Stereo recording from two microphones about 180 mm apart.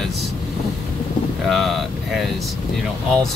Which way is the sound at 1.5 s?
Centre (ahead or behind).